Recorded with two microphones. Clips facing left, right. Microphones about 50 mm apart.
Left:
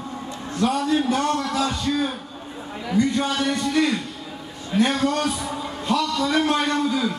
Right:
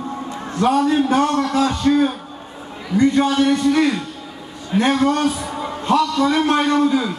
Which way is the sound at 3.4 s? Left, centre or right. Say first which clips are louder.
Right 5 dB; right.